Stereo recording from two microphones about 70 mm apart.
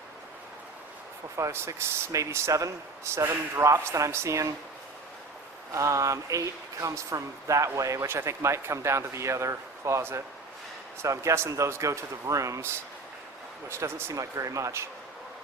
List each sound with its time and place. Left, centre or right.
1.4 s speech: right
5.7 s speech: right
8.0 s speech: right
13.7 s speech: right